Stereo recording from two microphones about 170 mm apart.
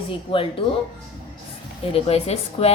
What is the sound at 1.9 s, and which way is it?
Speech, 35° left (ahead or behind).